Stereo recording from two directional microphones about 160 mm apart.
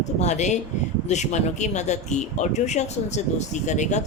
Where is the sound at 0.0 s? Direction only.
45° left (ahead or behind).